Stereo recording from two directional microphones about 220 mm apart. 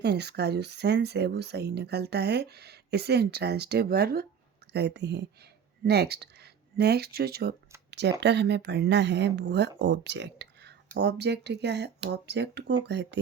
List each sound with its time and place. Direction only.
0.0 s a woman's voice: 50° right (ahead or behind)
7.9 s a sound: 50° right (ahead or behind)
8.2 s a woman's voice: 50° right (ahead or behind)